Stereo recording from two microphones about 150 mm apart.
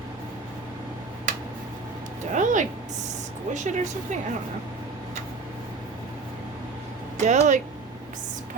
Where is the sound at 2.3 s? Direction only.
55° right (ahead or behind).